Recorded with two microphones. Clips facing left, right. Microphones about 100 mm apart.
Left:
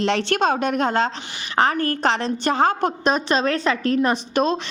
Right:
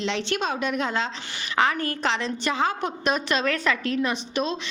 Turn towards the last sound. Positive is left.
turn(degrees=40)  # may be behind; listen again after turning